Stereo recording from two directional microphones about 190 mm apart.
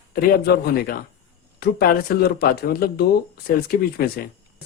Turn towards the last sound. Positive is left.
turn(degrees=55)  # may be behind; listen again after turning